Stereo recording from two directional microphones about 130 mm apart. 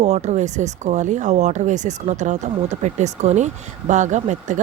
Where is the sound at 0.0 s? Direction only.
60° right (ahead or behind).